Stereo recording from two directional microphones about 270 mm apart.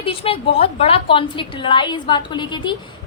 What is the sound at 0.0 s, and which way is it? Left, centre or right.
A woman's voice, left.